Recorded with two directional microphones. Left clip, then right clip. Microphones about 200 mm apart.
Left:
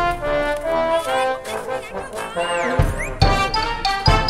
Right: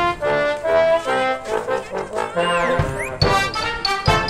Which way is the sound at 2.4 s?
30° right (ahead or behind).